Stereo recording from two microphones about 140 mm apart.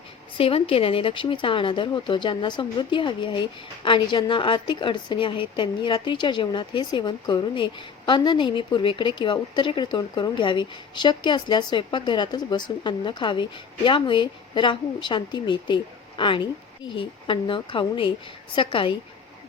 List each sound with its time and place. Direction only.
0.3 s a woman's voice: 40° left (ahead or behind)